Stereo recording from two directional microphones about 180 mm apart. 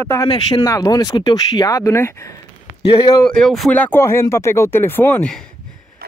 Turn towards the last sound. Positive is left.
turn(degrees=5)  # may be behind; listen again after turning